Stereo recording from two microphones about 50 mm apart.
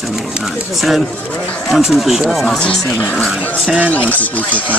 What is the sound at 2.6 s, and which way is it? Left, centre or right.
Speech, left.